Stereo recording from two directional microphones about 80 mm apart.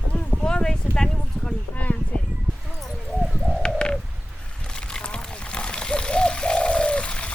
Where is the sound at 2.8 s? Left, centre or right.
Centre.